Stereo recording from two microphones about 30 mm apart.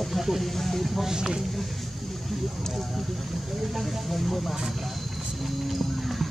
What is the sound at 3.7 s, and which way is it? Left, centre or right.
Speech, centre.